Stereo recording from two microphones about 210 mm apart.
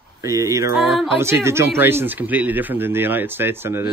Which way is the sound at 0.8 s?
Centre (ahead or behind).